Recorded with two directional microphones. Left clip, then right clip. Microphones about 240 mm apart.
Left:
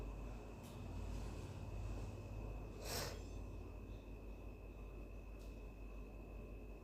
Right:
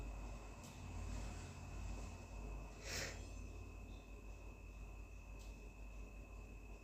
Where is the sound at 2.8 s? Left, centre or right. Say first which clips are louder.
Left 1 dB; centre.